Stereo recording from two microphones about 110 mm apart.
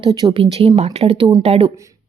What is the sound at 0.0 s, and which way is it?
Speech, 40° right (ahead or behind).